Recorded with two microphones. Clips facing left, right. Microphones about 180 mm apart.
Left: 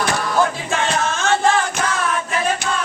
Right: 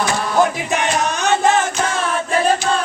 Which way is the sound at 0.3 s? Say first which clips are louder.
Right 4 dB; 20° right (ahead or behind).